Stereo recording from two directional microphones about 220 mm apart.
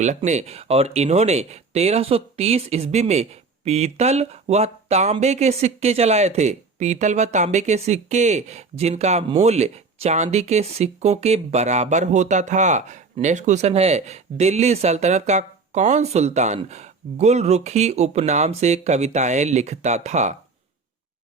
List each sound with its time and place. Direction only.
0.0 s speech: 30° right (ahead or behind)